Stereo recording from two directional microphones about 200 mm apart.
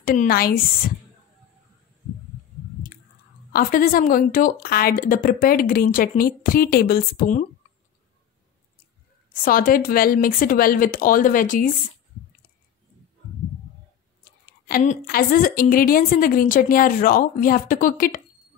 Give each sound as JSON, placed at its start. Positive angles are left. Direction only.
{"t": 0.0, "sound": "a woman's voice", "side_deg": 45}
{"t": 3.5, "sound": "a woman's voice", "side_deg": 45}
{"t": 9.3, "sound": "a woman's voice", "side_deg": 40}
{"t": 14.7, "sound": "a woman's voice", "side_deg": 40}